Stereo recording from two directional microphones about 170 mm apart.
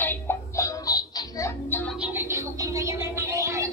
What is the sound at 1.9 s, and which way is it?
Music, 10° right (ahead or behind).